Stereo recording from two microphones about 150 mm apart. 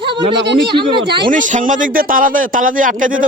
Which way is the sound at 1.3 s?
55° right (ahead or behind).